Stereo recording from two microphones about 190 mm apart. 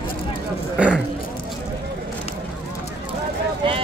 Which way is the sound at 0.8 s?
5° right (ahead or behind).